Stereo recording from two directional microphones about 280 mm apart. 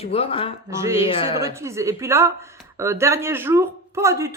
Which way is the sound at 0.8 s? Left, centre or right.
Centre.